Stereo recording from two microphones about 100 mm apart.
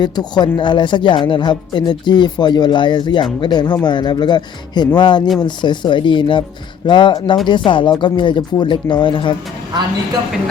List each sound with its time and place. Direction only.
0.0 s a woman's voice: 45° left (ahead or behind)